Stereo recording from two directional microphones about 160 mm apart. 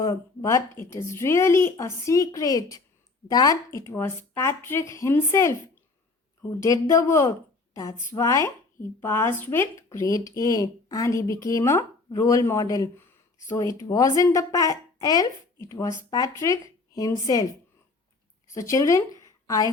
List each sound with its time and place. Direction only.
0.0 s a woman's voice: 20° left (ahead or behind)
6.6 s a woman's voice: 20° left (ahead or behind)
18.5 s a woman's voice: 20° left (ahead or behind)